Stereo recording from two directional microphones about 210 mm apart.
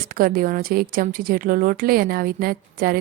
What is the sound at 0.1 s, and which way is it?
A woman's voice, 45° right (ahead or behind).